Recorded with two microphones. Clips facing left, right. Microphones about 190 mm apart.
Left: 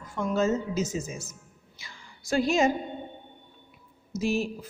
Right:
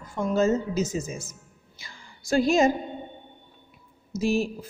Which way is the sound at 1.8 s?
40° right (ahead or behind).